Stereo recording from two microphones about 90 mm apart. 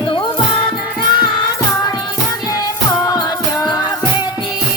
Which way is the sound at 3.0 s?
45° left (ahead or behind).